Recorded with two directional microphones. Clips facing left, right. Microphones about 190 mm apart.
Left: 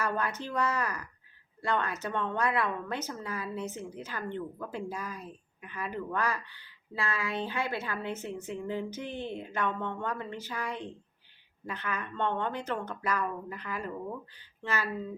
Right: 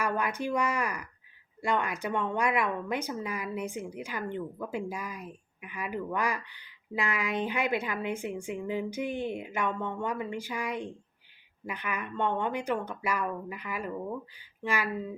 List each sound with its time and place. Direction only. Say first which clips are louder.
0.0 s a woman's voice: right 2 dB; 10° right (ahead or behind)